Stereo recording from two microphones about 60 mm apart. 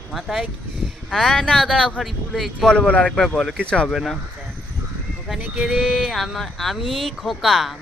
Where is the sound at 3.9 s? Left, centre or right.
Centre.